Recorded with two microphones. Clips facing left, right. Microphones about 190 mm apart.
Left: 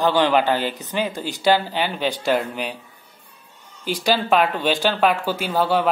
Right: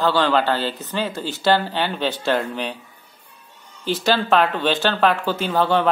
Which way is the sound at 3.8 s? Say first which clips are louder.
Right 1 dB; 10° left (ahead or behind).